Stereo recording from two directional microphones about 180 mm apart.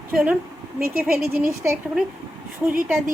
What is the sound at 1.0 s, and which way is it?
Speech, 55° right (ahead or behind).